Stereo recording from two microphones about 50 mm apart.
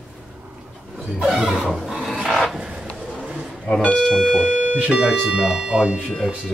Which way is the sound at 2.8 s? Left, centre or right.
Centre.